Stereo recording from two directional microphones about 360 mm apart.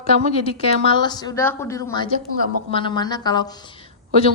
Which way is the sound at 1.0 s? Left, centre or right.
Centre.